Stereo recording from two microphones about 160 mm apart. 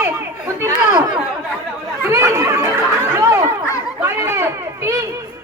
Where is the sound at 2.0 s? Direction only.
15° right (ahead or behind).